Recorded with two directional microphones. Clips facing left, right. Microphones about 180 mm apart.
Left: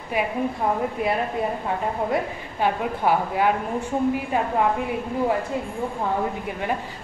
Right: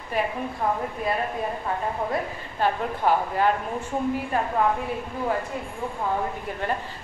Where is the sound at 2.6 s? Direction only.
10° left (ahead or behind).